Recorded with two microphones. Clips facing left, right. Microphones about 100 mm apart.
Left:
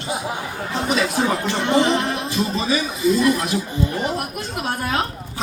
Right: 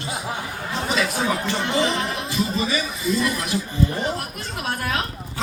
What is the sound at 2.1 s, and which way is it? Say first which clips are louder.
A man's voice: left 2 dB; 20° left (ahead or behind).